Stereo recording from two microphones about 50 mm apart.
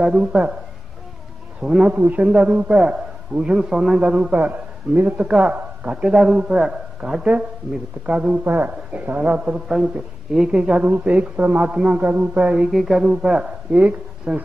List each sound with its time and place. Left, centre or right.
0.0 s speech: centre
1.6 s speech: right
2.0 s a man's voice: right
2.2 s a man's voice: right
4.0 s speech: centre
4.5 s a man's voice: right
5.1 s speech: right
8.5 s a man's voice: right
10.3 s speech: centre
10.9 s a man's voice: right
11.6 s speech: centre
12.7 s speech: centre
13.7 s speech: right